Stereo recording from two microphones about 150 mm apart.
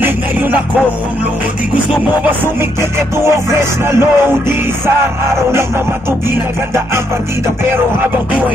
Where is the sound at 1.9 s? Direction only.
10° right (ahead or behind).